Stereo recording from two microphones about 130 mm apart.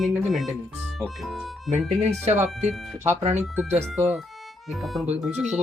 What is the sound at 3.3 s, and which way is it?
Speech, 15° right (ahead or behind).